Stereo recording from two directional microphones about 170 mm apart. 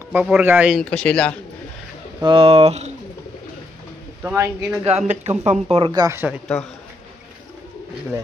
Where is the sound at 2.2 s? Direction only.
30° right (ahead or behind).